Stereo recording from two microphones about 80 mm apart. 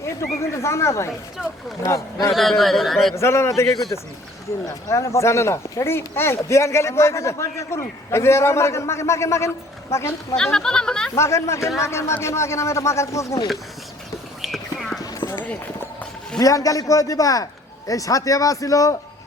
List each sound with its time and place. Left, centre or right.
0.0 s speech: left
2.3 s a man's voice: centre
3.2 s speech: left
4.6 s speech: left
10.3 s speech: centre
11.2 s speech: left
14.4 s whispering: centre
15.0 s clip-clop: left
16.4 s a man's voice: left